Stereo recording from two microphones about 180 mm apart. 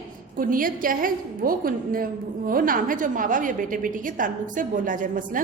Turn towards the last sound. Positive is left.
turn(degrees=-45)  # may be behind; listen again after turning